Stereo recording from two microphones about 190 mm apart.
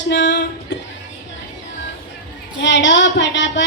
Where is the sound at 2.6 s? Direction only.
70° left (ahead or behind).